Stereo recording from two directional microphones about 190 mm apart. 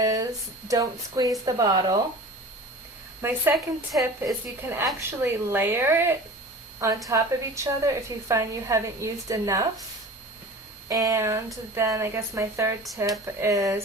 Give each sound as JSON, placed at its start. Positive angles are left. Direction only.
{"t": 0.0, "sound": "a sound", "side_deg": -20}
{"t": 0.7, "sound": "speech", "side_deg": -20}
{"t": 3.2, "sound": "a woman's voice", "side_deg": -10}
{"t": 10.8, "sound": "a woman's voice", "side_deg": -15}